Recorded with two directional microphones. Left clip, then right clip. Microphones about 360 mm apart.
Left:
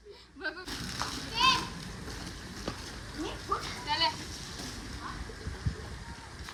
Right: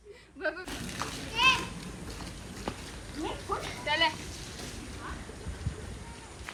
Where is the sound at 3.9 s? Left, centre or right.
Centre.